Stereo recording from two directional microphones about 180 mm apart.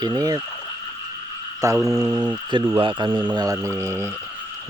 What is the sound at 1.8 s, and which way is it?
Mantra, centre (ahead or behind).